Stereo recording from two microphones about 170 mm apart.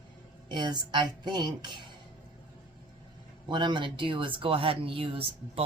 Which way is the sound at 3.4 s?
25° right (ahead or behind).